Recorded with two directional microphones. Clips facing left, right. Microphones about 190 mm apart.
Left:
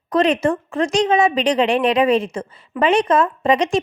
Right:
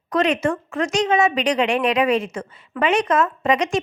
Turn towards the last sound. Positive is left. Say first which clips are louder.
# left 3 dB
turn(degrees=30)  # may be behind; listen again after turning